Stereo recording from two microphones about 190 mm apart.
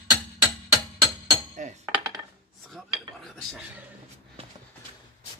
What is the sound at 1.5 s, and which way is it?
Cutlery, 40° right (ahead or behind).